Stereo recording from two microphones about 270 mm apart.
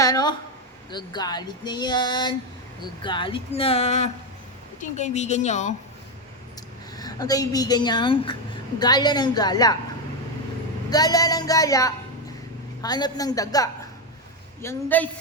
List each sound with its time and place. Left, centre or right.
0.0 s a sound: centre
0.9 s speech: centre
6.9 s speech: centre
10.8 s speech: centre